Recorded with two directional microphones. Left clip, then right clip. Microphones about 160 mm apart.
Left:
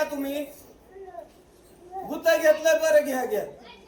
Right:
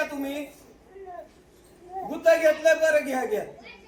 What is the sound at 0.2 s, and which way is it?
Speech, 10° right (ahead or behind).